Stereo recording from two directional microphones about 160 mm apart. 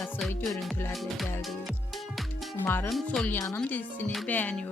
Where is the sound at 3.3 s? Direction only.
15° left (ahead or behind).